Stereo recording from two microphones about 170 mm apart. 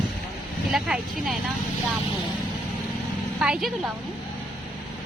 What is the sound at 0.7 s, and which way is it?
Speech, centre (ahead or behind).